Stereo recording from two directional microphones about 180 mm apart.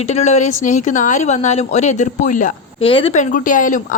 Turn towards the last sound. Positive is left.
turn(degrees=45)  # may be behind; listen again after turning